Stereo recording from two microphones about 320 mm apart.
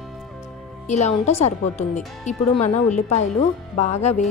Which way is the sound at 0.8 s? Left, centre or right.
Left.